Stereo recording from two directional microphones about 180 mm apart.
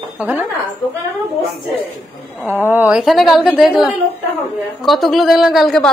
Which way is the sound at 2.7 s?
10° right (ahead or behind).